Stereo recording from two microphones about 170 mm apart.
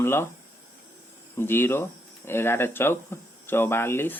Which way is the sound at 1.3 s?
15° left (ahead or behind).